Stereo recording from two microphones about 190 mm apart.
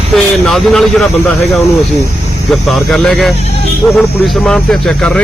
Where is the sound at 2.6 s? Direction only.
Centre (ahead or behind).